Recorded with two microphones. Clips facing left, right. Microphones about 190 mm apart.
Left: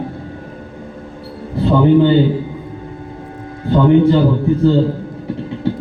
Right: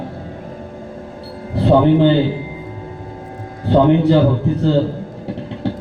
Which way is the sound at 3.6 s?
75° right (ahead or behind).